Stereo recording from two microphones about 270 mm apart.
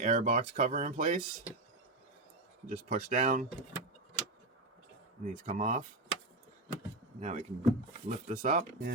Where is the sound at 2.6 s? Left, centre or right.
Right.